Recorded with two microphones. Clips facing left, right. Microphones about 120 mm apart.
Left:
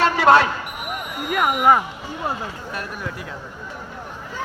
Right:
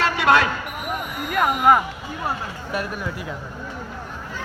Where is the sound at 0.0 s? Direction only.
30° left (ahead or behind).